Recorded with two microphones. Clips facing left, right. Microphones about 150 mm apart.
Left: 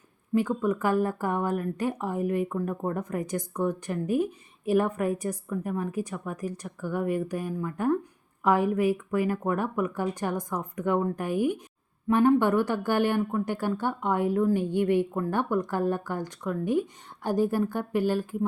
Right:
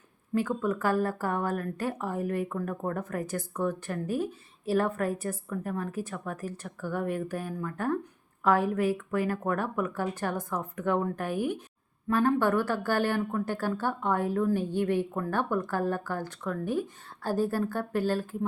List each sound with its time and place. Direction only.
0.3 s a woman's voice: 15° left (ahead or behind)